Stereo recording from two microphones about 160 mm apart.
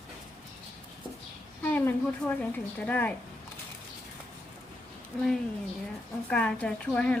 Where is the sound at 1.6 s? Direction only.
10° left (ahead or behind).